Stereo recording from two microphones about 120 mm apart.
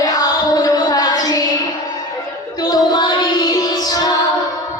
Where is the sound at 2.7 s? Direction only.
35° left (ahead or behind).